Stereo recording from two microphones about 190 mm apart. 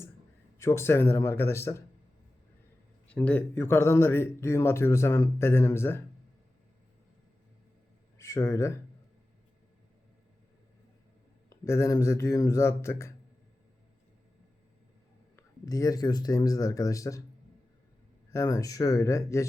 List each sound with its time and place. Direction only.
0.6 s speech: 15° left (ahead or behind)
3.1 s speech: 5° left (ahead or behind)
8.2 s speech: 15° left (ahead or behind)
11.4 s speech: 15° left (ahead or behind)
15.6 s a man's voice: 20° left (ahead or behind)
18.3 s speech: 15° left (ahead or behind)